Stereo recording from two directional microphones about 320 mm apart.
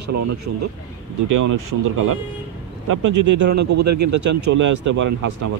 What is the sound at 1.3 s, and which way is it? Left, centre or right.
Speech, right.